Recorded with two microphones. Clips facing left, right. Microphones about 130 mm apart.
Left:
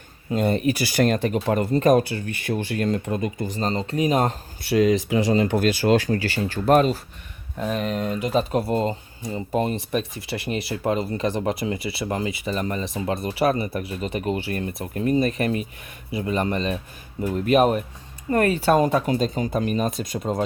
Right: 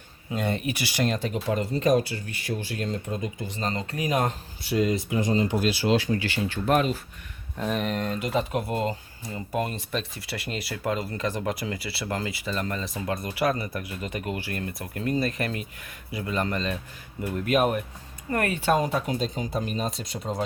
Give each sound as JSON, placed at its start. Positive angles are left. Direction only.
{"t": 0.3, "sound": "speech", "side_deg": 40}
{"t": 4.6, "sound": "speech", "side_deg": 80}
{"t": 7.6, "sound": "speech", "side_deg": 0}
{"t": 8.5, "sound": "speech", "side_deg": 35}
{"t": 18.8, "sound": "speech", "side_deg": 50}